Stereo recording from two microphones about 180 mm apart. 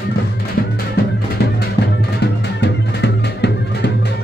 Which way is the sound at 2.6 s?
70° left (ahead or behind).